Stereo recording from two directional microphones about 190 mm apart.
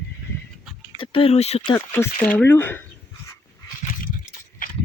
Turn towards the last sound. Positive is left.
turn(degrees=45)  # may be behind; listen again after turning